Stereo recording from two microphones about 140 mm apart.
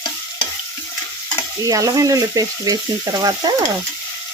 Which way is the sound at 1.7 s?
25° right (ahead or behind).